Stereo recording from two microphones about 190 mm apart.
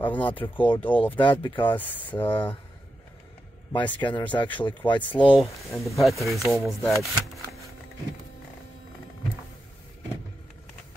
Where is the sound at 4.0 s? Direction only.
25° left (ahead or behind).